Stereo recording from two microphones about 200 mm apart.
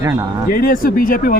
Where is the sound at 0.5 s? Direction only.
45° left (ahead or behind).